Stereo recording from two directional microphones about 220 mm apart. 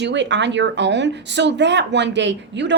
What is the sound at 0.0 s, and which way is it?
Speech, 55° right (ahead or behind).